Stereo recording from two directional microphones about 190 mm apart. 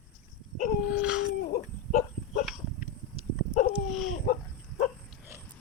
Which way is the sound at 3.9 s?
Centre (ahead or behind).